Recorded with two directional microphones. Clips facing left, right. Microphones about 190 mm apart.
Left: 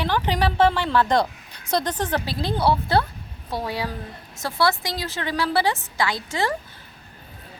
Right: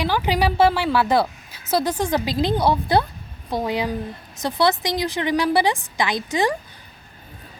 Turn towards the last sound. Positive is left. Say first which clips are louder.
# right 3 dB
turn(degrees=-15)  # may be behind; listen again after turning